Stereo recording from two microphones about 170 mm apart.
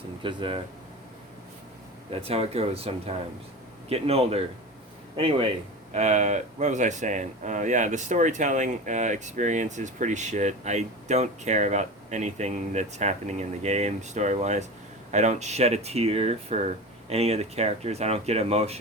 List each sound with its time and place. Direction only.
0.2 s speech: 30° right (ahead or behind)
2.2 s speech: 35° right (ahead or behind)